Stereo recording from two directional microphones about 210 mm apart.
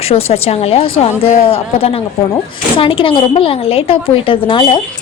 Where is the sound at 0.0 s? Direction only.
30° left (ahead or behind).